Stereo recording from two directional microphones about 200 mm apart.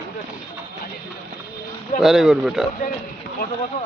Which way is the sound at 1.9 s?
Centre (ahead or behind).